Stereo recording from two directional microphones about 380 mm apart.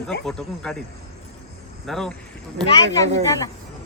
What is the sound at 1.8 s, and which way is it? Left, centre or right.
Speech, centre.